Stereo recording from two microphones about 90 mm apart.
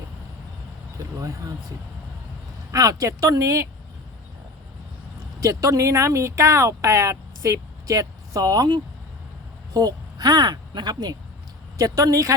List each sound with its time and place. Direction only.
1.2 s speech: 40° right (ahead or behind)
2.7 s speech: 40° right (ahead or behind)
5.4 s speech: 40° right (ahead or behind)